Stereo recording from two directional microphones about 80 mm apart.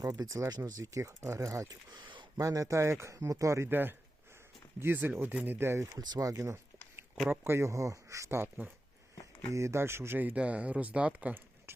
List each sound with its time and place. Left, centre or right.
0.0 s speech: right
1.9 s a sound: right
2.4 s speech: right
3.7 s speech: right
9.5 s speech: right; by 11.4 s centre